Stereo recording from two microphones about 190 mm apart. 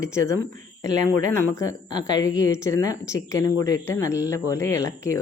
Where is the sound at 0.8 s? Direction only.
15° left (ahead or behind).